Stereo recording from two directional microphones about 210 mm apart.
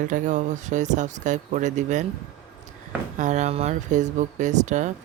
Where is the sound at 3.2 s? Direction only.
35° right (ahead or behind).